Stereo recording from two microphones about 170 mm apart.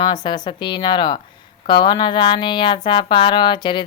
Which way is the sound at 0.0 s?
25° left (ahead or behind).